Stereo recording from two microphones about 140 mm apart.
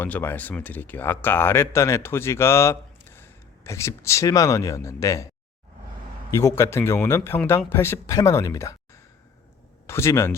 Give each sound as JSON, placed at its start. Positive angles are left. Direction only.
{"t": 0.0, "sound": "speech", "side_deg": 15}
{"t": 6.3, "sound": "speech", "side_deg": 20}